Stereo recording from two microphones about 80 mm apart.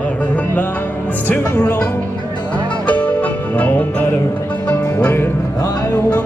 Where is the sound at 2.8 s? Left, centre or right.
Centre.